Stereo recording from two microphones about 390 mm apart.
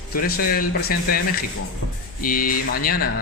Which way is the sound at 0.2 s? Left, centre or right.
Left.